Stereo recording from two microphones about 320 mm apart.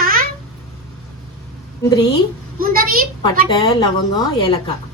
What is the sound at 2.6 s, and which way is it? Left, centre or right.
Speech, right.